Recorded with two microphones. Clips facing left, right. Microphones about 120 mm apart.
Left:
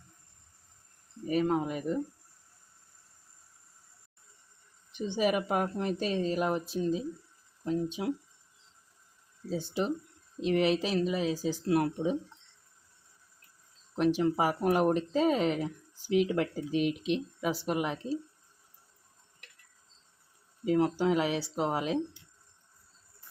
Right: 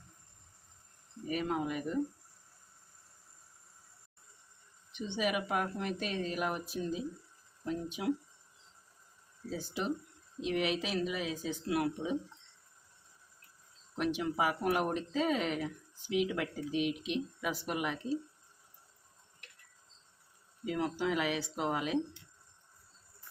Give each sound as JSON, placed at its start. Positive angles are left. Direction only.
{"t": 1.3, "sound": "speech", "side_deg": 35}
{"t": 4.9, "sound": "speech", "side_deg": 40}
{"t": 9.5, "sound": "speech", "side_deg": 25}
{"t": 13.9, "sound": "speech", "side_deg": 35}
{"t": 20.7, "sound": "speech", "side_deg": 35}